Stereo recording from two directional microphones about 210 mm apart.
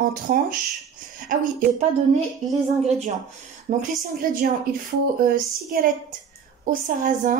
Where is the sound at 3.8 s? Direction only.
40° right (ahead or behind).